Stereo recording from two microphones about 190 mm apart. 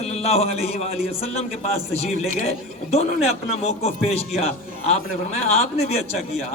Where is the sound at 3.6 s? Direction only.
35° left (ahead or behind).